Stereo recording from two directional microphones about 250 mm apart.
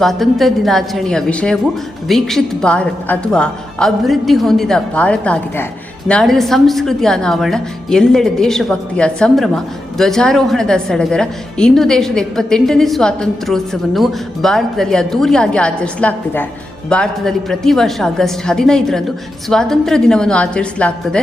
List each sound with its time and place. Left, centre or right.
0.0 s a woman's voice: centre